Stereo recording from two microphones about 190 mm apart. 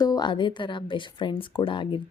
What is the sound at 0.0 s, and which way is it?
Speech, 20° left (ahead or behind).